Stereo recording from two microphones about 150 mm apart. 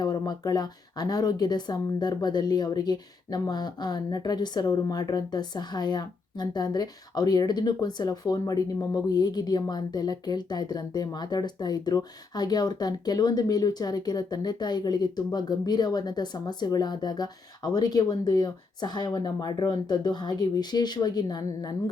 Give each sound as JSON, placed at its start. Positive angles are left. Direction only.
{"t": 0.0, "sound": "speech", "side_deg": 25}